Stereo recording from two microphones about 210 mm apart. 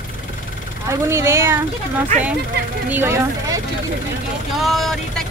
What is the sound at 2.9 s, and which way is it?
Speech, 10° right (ahead or behind).